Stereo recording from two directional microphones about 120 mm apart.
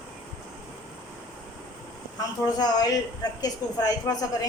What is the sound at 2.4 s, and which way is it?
A woman's voice, 35° left (ahead or behind).